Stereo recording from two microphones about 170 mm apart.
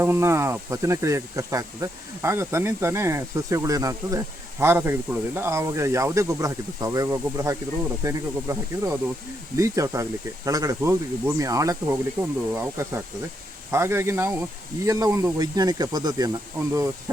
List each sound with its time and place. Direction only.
0.0 s speech: 15° right (ahead or behind)